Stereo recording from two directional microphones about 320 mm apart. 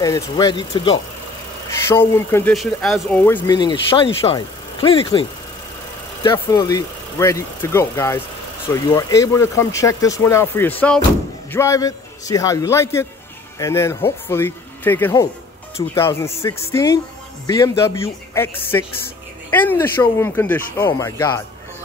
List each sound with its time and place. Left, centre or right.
0.0 s speech: centre
6.2 s speech: centre